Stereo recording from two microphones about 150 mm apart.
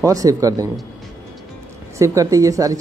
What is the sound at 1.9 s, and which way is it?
Speech, 20° right (ahead or behind).